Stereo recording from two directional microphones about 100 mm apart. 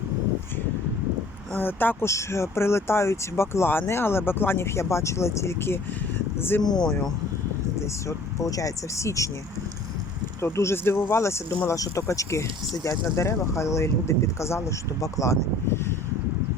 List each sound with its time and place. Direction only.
1.5 s speech: 20° left (ahead or behind)
6.6 s speech: 40° left (ahead or behind)
7.8 s speech: 30° left (ahead or behind)
10.4 s speech: 25° left (ahead or behind)